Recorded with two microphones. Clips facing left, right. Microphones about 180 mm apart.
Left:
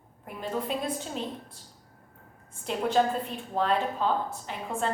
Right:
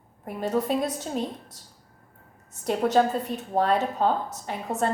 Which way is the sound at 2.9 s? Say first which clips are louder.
Even; 40° right (ahead or behind).